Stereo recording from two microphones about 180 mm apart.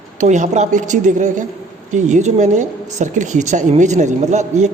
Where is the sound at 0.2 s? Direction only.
45° right (ahead or behind).